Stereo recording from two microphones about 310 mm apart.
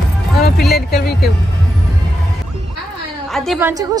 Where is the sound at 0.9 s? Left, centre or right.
Left.